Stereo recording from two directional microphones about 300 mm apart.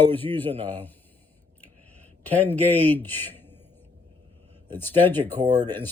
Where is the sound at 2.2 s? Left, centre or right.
Centre.